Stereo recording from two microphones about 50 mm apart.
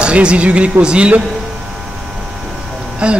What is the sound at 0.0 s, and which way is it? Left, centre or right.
Speech, right.